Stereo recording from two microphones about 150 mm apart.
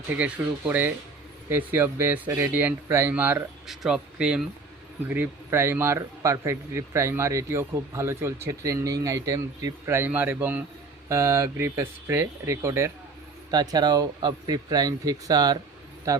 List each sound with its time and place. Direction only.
0.1 s a man's voice: 10° right (ahead or behind)